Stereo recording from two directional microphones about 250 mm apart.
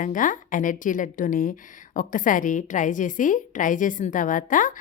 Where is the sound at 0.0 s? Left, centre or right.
Left.